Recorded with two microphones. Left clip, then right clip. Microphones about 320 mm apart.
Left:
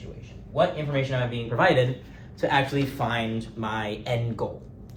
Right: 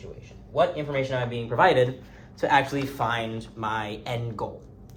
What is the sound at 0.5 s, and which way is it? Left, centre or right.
Speech, right.